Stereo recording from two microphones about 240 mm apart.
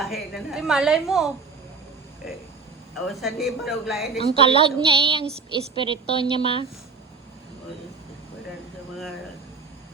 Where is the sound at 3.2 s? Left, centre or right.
Centre.